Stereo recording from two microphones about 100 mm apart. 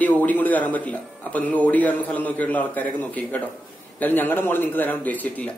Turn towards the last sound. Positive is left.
turn(degrees=15)  # may be behind; listen again after turning